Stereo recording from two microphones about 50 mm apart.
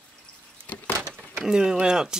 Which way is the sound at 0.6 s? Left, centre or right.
Left.